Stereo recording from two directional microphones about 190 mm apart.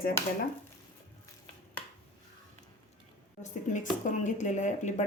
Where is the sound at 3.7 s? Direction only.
40° left (ahead or behind).